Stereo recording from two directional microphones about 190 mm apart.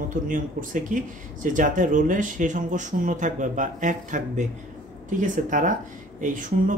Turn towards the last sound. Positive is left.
turn(degrees=-45)  # may be behind; listen again after turning